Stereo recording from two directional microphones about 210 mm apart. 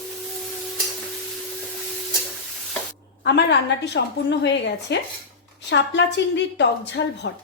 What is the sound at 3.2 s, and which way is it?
A woman's voice, 55° left (ahead or behind).